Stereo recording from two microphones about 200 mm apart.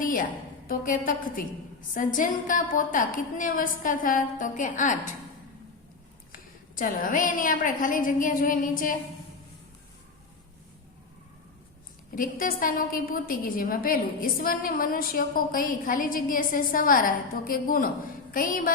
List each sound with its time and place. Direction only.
0.0 s a sound: 45° left (ahead or behind)
0.7 s a woman's voice: 45° left (ahead or behind)
6.3 s a woman's voice: 45° left (ahead or behind)
12.1 s a woman's voice: 45° left (ahead or behind)